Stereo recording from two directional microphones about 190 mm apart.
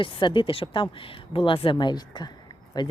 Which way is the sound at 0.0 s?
25° left (ahead or behind).